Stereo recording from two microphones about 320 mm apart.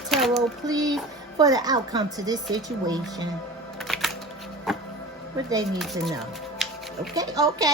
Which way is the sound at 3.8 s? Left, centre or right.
Centre.